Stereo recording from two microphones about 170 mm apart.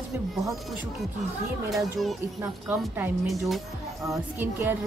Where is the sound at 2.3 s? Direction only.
10° right (ahead or behind).